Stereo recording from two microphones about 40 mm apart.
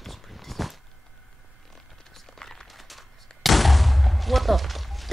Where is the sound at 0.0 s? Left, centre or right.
Centre.